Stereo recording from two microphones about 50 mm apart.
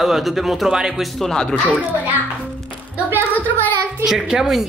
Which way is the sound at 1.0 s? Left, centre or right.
Centre.